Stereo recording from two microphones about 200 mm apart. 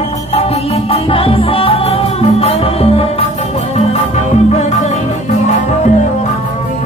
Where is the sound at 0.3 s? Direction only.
30° left (ahead or behind).